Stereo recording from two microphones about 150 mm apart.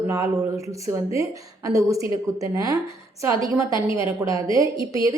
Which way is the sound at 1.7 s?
20° right (ahead or behind).